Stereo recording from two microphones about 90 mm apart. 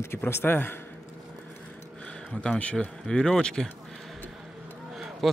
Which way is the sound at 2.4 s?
10° left (ahead or behind).